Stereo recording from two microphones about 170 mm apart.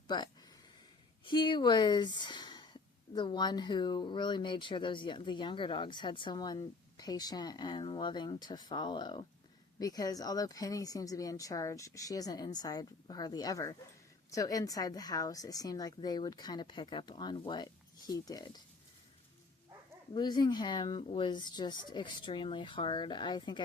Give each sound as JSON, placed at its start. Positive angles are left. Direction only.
{"t": 0.1, "sound": "speech", "side_deg": 25}
{"t": 20.1, "sound": "speech", "side_deg": 25}